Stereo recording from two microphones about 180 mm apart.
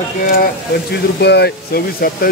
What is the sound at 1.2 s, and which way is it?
Speech, 65° left (ahead or behind).